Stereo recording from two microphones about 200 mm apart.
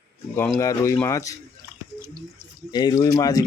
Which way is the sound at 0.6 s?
15° left (ahead or behind).